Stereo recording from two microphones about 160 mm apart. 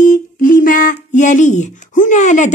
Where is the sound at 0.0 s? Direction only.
55° left (ahead or behind).